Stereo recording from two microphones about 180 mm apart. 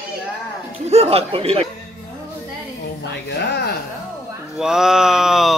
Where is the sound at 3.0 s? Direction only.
70° left (ahead or behind).